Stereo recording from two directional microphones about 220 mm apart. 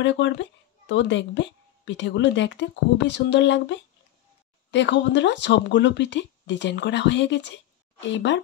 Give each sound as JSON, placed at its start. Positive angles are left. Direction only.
{"t": 0.0, "sound": "speech", "side_deg": 55}